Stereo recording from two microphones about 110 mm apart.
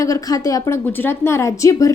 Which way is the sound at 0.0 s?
30° left (ahead or behind).